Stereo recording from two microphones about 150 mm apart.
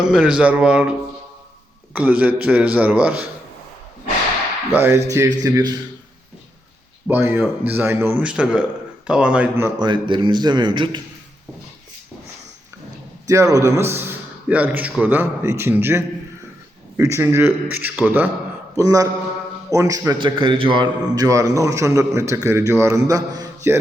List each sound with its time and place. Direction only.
0.0 s a man's voice: 5° right (ahead or behind)
4.7 s a man's voice: 15° right (ahead or behind)
7.1 s a man's voice: 15° right (ahead or behind)
9.7 s a man's voice: 30° right (ahead or behind)
13.2 s a man's voice: 20° right (ahead or behind)
18.8 s a man's voice: 20° right (ahead or behind)